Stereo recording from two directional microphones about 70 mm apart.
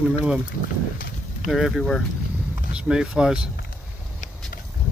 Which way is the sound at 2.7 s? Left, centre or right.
Centre.